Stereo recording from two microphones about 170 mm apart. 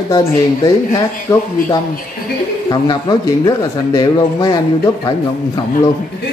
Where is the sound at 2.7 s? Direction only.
25° left (ahead or behind).